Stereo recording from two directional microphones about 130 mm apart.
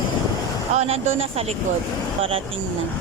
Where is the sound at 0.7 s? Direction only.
60° right (ahead or behind).